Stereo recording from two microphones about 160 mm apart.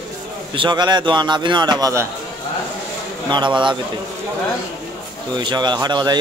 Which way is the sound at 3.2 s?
30° right (ahead or behind).